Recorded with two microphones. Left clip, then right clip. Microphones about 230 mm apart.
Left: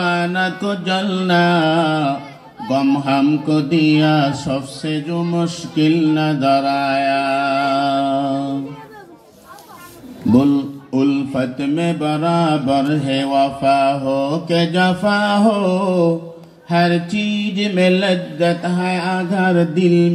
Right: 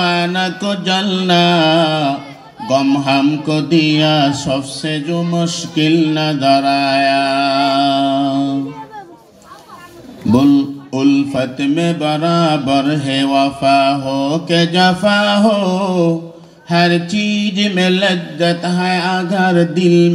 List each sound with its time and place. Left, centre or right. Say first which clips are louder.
0.0 s music: right 2 dB; right
10.9 s music: right 3 dB; right